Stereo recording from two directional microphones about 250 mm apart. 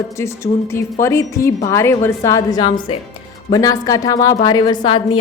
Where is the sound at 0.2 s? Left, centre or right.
Centre.